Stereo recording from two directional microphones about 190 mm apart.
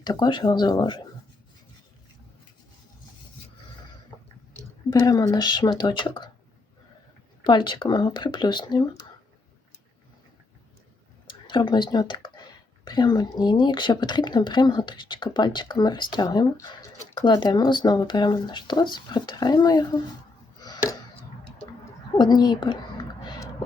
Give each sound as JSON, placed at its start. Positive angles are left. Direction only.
{"t": 0.0, "sound": "speech", "side_deg": 20}
{"t": 4.9, "sound": "speech", "side_deg": 20}
{"t": 7.4, "sound": "speech", "side_deg": 25}
{"t": 11.3, "sound": "speech", "side_deg": 25}
{"t": 20.6, "sound": "a sound", "side_deg": 20}
{"t": 22.2, "sound": "a sound", "side_deg": 20}